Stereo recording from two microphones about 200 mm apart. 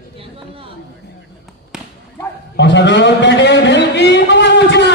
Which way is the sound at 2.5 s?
60° left (ahead or behind).